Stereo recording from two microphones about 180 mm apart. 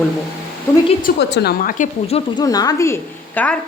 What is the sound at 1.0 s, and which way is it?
A woman's voice, 65° left (ahead or behind).